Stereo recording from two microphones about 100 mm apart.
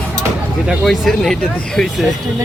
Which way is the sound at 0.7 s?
Centre (ahead or behind).